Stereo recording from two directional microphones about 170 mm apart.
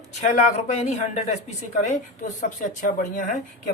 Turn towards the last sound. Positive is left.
turn(degrees=50)  # may be behind; listen again after turning